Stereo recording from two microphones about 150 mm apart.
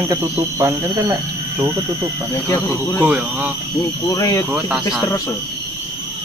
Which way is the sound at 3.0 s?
10° right (ahead or behind).